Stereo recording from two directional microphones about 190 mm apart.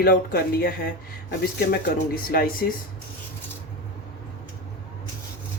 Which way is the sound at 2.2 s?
50° left (ahead or behind).